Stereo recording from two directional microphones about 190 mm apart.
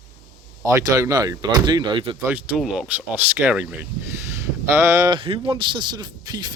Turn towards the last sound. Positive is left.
turn(degrees=-20)  # may be behind; listen again after turning